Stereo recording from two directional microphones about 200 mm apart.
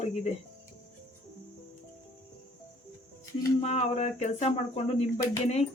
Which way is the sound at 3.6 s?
35° left (ahead or behind).